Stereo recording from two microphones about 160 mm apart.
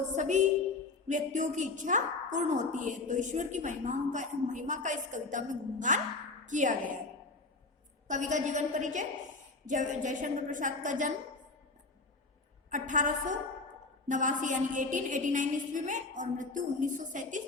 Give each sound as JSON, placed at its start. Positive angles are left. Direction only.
{"t": 0.1, "sound": "a woman's voice", "side_deg": -50}
{"t": 8.0, "sound": "a woman's voice", "side_deg": -50}
{"t": 12.7, "sound": "a woman's voice", "side_deg": -55}